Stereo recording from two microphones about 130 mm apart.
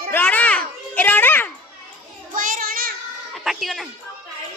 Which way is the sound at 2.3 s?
90° right.